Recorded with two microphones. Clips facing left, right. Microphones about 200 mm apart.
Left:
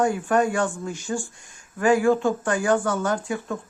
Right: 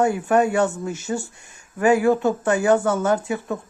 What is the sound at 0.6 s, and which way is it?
Speech, 20° right (ahead or behind).